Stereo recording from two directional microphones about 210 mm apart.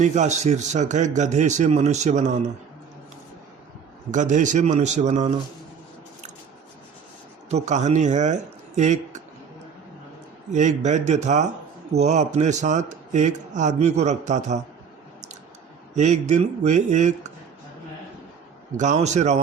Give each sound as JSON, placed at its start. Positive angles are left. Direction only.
{"t": 0.0, "sound": "a man's voice", "side_deg": -35}
{"t": 4.1, "sound": "a man's voice", "side_deg": -35}
{"t": 7.5, "sound": "speech", "side_deg": -35}
{"t": 10.5, "sound": "a man's voice", "side_deg": -35}
{"t": 16.0, "sound": "a man's voice", "side_deg": -35}
{"t": 18.8, "sound": "a man's voice", "side_deg": -35}